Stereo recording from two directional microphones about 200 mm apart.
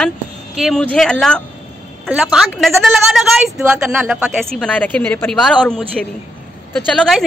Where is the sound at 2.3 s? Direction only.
Centre (ahead or behind).